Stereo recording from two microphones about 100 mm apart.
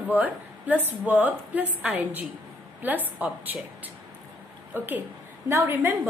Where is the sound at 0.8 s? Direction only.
20° right (ahead or behind).